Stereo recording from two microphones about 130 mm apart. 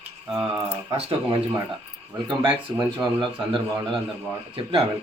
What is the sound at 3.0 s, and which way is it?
Speech, 10° right (ahead or behind).